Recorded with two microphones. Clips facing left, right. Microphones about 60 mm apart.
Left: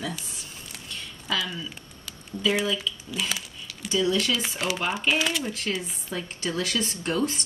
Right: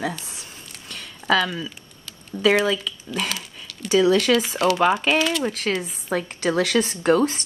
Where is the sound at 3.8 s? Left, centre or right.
Right.